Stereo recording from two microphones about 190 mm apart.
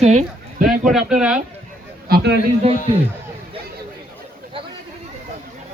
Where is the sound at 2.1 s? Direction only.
55° right (ahead or behind).